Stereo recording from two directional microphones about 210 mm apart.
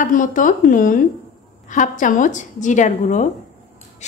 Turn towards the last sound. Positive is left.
turn(degrees=35)  # may be behind; listen again after turning